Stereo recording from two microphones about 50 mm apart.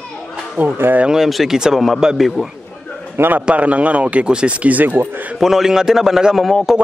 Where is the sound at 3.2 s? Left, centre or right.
Right.